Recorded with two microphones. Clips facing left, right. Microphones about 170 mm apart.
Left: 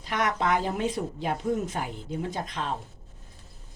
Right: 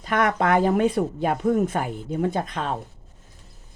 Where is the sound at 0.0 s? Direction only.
55° right (ahead or behind).